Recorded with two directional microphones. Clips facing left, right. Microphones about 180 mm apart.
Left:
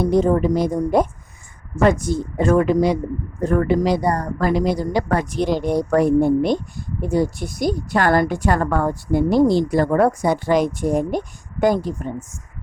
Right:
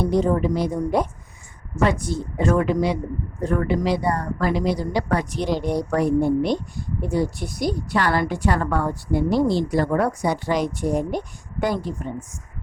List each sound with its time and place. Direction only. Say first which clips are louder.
0.1 s speech: left 3 dB; 45° left (ahead or behind)